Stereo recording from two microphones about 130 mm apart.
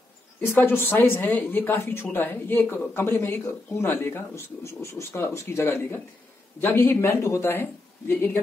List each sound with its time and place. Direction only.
0.6 s speech: 15° left (ahead or behind)